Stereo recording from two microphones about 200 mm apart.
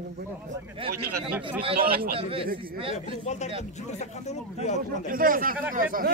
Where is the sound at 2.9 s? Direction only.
35° left (ahead or behind).